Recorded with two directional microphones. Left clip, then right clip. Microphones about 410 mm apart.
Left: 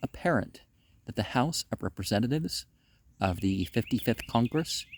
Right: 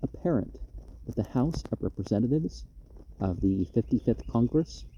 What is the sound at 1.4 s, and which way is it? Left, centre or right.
Speech, left.